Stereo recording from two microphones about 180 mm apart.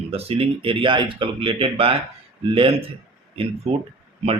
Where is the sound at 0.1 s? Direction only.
35° right (ahead or behind).